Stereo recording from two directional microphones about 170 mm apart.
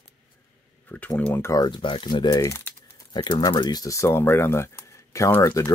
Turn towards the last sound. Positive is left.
turn(degrees=15)  # may be behind; listen again after turning